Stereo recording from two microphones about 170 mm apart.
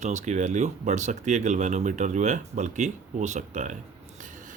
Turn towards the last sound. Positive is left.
turn(degrees=-45)  # may be behind; listen again after turning